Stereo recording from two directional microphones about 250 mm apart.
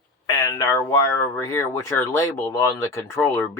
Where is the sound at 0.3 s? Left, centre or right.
Centre.